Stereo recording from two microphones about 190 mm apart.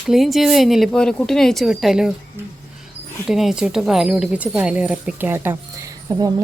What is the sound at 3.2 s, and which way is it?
Speech, centre (ahead or behind).